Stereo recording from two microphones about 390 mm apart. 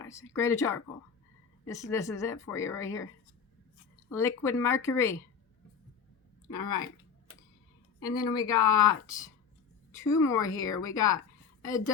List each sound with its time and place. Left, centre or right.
0.0 s speech: centre
4.1 s speech: centre
7.9 s a woman's voice: left
8.4 s a woman's voice: centre